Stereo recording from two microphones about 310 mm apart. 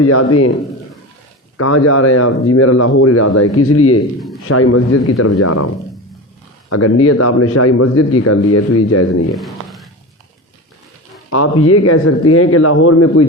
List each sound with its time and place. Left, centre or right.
0.0 s a man's voice: left
1.5 s a man's voice: left
6.7 s a man's voice: left
9.3 s a sound: centre
11.3 s a man's voice: left